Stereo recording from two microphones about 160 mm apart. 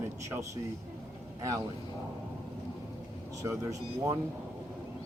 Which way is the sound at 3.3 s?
20° right (ahead or behind).